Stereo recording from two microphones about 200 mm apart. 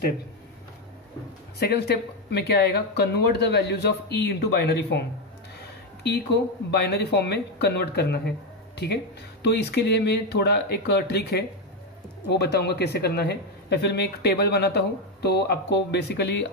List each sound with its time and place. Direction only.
1.6 s speech: 55° left (ahead or behind)
6.0 s speech: 55° left (ahead or behind)